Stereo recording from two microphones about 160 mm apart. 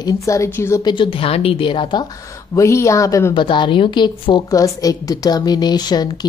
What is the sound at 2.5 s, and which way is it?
Speech, 20° left (ahead or behind).